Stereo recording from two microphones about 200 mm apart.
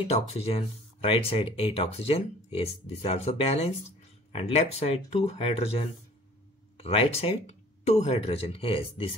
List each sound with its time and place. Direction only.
0.1 s speech: 30° left (ahead or behind)